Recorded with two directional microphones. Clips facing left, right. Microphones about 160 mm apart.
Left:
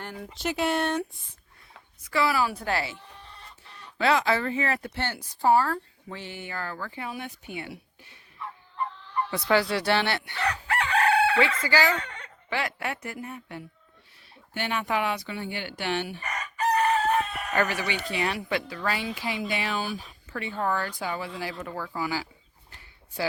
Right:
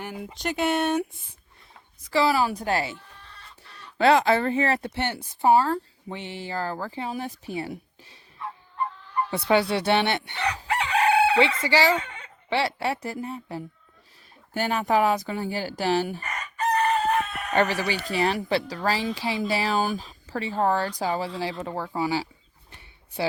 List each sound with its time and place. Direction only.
0.0 s speech: 10° right (ahead or behind)
0.3 s speech: centre (ahead or behind)
2.1 s speech: 30° right (ahead or behind)
2.7 s speech: 40° right (ahead or behind)
4.4 s speech: 30° right (ahead or behind)
9.3 s crowing: 25° right (ahead or behind)
12.5 s speech: 30° right (ahead or behind)
16.7 s chicken: 5° left (ahead or behind)
17.5 s speech: 30° right (ahead or behind)